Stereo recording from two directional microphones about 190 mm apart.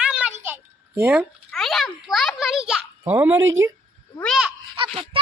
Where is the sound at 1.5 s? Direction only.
Centre (ahead or behind).